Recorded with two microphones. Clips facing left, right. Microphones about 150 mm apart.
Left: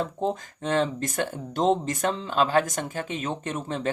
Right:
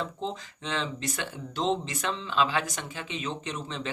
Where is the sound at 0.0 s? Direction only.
50° left (ahead or behind).